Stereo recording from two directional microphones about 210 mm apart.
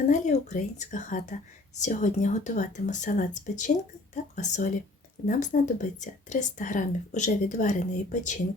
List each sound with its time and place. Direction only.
0.1 s speech: 35° left (ahead or behind)